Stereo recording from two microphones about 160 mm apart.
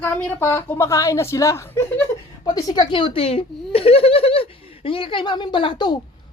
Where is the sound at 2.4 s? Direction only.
25° left (ahead or behind).